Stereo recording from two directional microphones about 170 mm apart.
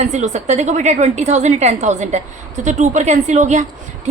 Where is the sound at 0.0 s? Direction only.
45° right (ahead or behind).